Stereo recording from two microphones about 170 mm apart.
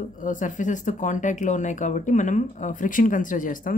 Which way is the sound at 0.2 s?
50° left (ahead or behind).